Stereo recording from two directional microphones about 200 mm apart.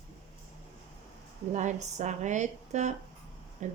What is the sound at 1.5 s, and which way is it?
Speech, 35° right (ahead or behind).